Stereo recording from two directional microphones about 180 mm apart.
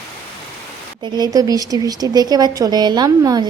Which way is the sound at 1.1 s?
20° right (ahead or behind).